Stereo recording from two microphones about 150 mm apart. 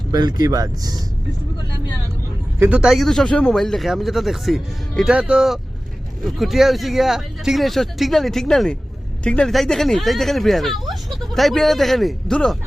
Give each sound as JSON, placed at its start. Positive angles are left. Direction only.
{"t": 0.1, "sound": "speech", "side_deg": -25}
{"t": 2.6, "sound": "speech", "side_deg": -10}